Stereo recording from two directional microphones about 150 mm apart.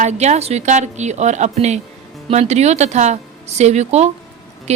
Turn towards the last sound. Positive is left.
turn(degrees=-45)  # may be behind; listen again after turning